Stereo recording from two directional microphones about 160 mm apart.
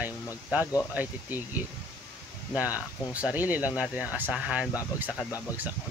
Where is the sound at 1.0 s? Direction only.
10° right (ahead or behind).